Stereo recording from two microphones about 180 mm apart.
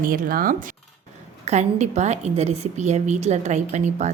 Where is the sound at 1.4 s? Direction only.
40° right (ahead or behind).